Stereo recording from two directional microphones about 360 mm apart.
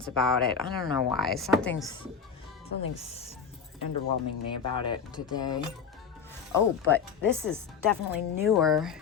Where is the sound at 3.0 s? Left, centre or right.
Centre.